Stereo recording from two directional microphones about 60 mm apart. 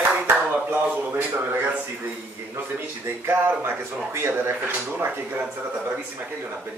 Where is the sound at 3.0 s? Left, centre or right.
Right.